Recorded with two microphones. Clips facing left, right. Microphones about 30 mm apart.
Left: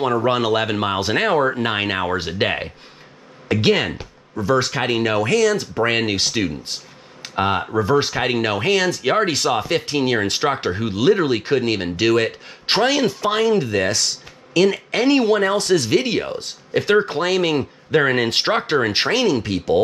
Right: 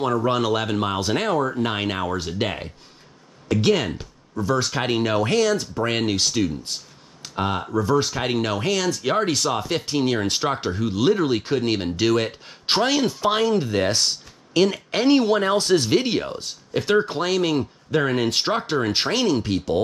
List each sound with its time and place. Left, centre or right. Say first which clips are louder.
0.0 s speech: left 3 dB; left
0.3 s speech: left 3 dB; centre
14.5 s speech: left 3 dB; centre
15.6 s speech: left 2 dB; centre
16.2 s speech: left 3 dB; centre
19.1 s speech: left 2 dB; centre